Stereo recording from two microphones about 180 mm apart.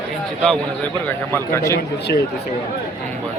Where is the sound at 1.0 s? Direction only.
10° left (ahead or behind).